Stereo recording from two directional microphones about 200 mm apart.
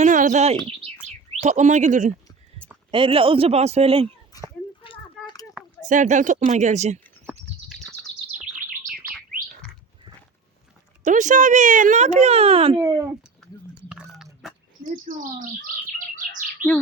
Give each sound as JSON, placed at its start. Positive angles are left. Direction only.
{"t": 0.0, "sound": "bird", "side_deg": -40}
{"t": 1.4, "sound": "speech", "side_deg": -35}
{"t": 2.9, "sound": "a man's voice", "side_deg": -25}
{"t": 4.3, "sound": "a sound", "side_deg": 20}
{"t": 5.8, "sound": "speech", "side_deg": -40}
{"t": 7.8, "sound": "bird", "side_deg": 0}
{"t": 8.5, "sound": "bird", "side_deg": -40}
{"t": 9.0, "sound": "chirp tone", "side_deg": -5}
{"t": 11.0, "sound": "speech", "side_deg": -40}
{"t": 12.8, "sound": "speech", "side_deg": -15}
{"t": 13.4, "sound": "a sound", "side_deg": 0}
{"t": 16.6, "sound": "bird", "side_deg": -40}